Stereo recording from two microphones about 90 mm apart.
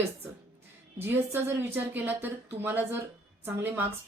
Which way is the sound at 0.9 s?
25° right (ahead or behind).